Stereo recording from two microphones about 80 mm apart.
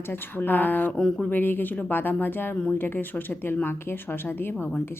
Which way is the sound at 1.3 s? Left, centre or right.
Left.